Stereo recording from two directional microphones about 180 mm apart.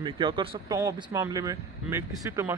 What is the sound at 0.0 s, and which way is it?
Speech, 25° right (ahead or behind).